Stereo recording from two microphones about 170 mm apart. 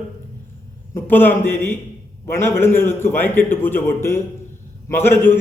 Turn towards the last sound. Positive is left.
turn(degrees=15)  # may be behind; listen again after turning